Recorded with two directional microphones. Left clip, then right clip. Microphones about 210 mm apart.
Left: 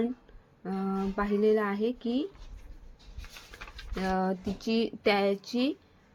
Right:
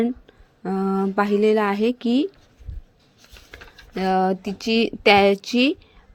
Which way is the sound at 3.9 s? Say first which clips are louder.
Right 10 dB; 30° right (ahead or behind).